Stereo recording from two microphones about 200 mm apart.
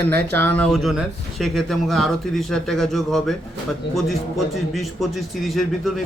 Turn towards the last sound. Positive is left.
turn(degrees=0)  # may be behind; listen again after turning